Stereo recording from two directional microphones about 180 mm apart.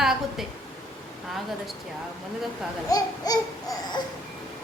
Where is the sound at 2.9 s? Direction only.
20° left (ahead or behind).